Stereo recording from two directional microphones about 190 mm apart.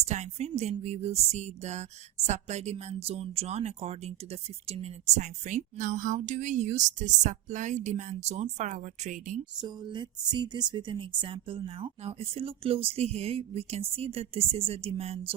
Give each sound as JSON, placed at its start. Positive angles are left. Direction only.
{"t": 0.0, "sound": "a woman's voice", "side_deg": -35}
{"t": 9.6, "sound": "speech", "side_deg": -25}